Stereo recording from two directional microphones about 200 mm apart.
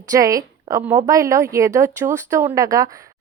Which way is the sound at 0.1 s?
15° right (ahead or behind).